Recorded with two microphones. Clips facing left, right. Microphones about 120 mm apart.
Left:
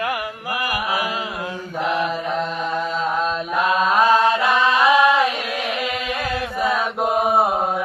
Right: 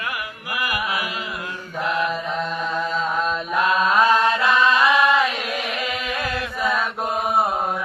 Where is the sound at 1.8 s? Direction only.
20° left (ahead or behind).